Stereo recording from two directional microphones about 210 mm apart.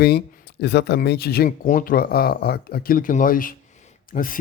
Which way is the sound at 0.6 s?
55° left (ahead or behind).